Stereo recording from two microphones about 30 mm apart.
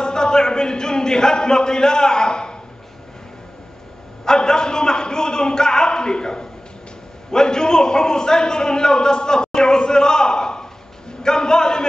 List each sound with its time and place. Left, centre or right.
0.0 s speech: left
4.2 s a man's voice: left
11.2 s a sound: left